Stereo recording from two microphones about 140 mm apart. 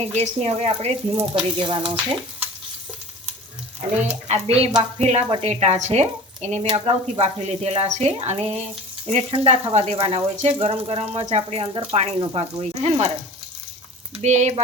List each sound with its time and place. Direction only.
0.1 s speech: 50° right (ahead or behind)
1.4 s a sound: 35° right (ahead or behind)
4.1 s speech: 50° right (ahead or behind)
14.2 s frying: 55° right (ahead or behind)